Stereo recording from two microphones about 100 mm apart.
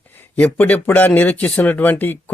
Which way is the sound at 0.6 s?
15° left (ahead or behind).